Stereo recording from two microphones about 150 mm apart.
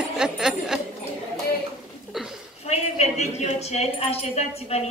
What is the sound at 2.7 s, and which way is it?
A woman's voice, 45° left (ahead or behind).